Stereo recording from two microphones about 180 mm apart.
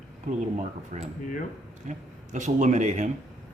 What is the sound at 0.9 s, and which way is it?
A man's voice, 40° right (ahead or behind).